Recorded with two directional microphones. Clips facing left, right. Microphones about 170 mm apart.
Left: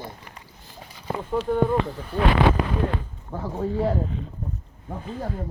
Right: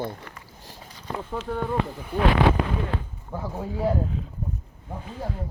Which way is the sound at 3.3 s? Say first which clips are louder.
Left 4 dB; 5° right (ahead or behind).